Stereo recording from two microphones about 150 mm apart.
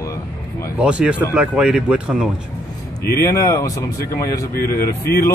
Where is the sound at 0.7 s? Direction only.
5° right (ahead or behind).